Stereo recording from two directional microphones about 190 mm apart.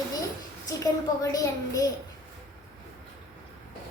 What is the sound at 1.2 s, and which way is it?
Speech, 20° left (ahead or behind).